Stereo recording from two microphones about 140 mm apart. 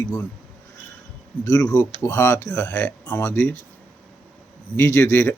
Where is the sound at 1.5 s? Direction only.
25° left (ahead or behind).